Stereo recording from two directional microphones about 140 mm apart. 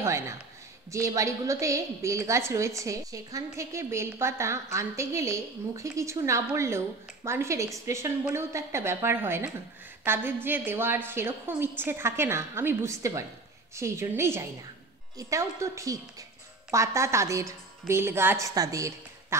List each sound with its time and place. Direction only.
0.0 s a woman's voice: 20° right (ahead or behind)